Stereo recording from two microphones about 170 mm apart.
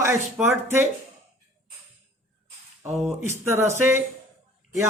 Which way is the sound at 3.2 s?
15° right (ahead or behind).